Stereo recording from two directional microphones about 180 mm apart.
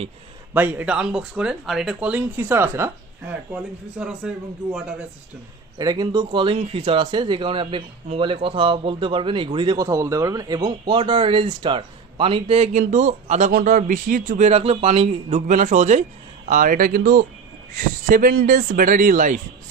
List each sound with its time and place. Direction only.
0.5 s speech: 10° right (ahead or behind)
5.8 s speech: 20° right (ahead or behind); by 19.4 s 45° right (ahead or behind)